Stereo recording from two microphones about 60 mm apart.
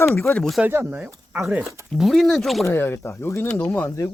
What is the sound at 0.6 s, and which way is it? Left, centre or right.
Speech, right.